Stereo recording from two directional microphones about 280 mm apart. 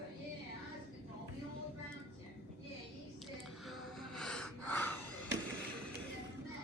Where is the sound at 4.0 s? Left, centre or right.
Centre.